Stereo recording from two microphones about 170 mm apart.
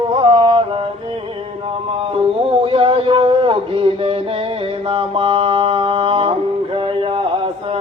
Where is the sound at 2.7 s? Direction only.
30° right (ahead or behind).